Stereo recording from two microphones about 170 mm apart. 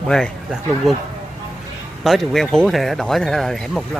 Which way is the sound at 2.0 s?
Centre (ahead or behind).